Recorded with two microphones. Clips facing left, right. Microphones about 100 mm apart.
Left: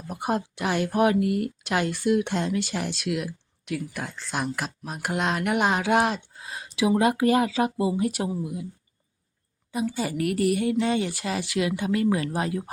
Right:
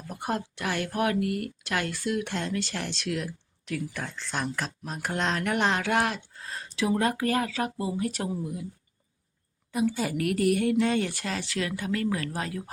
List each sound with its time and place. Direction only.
0.1 s speech: 15° left (ahead or behind)
9.7 s a woman's voice: centre (ahead or behind); by 12.6 s 20° left (ahead or behind)